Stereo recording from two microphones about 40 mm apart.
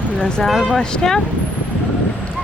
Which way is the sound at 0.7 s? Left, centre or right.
Centre.